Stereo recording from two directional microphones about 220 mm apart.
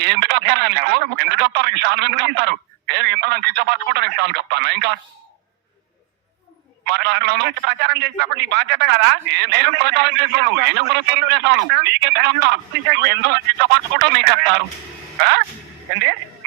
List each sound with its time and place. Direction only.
0.0 s a man's voice: 50° right (ahead or behind)
6.8 s a man's voice: 50° right (ahead or behind)